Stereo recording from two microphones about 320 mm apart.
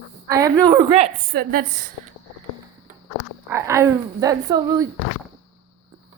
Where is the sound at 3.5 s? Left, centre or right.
Centre.